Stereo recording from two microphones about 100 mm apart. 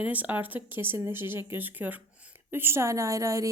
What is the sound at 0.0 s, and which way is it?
A woman's voice, 15° right (ahead or behind).